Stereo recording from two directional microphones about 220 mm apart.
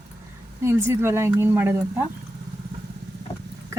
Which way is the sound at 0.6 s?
10° right (ahead or behind).